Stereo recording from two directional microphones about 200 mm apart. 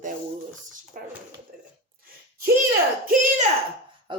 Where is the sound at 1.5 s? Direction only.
5° right (ahead or behind).